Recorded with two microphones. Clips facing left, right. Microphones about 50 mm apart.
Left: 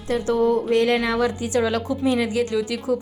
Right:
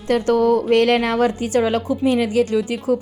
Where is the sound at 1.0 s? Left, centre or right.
Right.